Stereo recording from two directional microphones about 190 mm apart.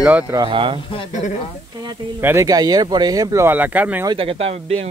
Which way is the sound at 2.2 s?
15° right (ahead or behind).